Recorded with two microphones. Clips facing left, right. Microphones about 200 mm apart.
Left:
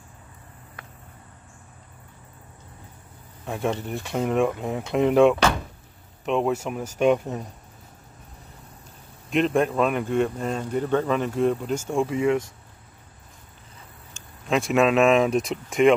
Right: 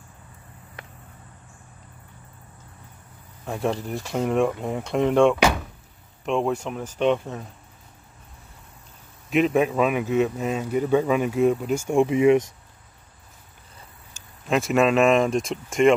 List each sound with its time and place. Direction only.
3.4 s speech: centre (ahead or behind)
9.3 s speech: 5° right (ahead or behind); by 12.4 s 20° right (ahead or behind)
14.1 s speech: centre (ahead or behind)